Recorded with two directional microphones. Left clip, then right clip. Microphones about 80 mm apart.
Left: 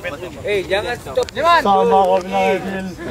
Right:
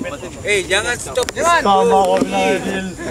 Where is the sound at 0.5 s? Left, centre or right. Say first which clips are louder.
Right 2 dB; right.